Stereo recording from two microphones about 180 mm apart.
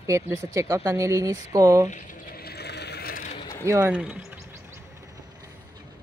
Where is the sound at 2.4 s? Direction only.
65° left (ahead or behind).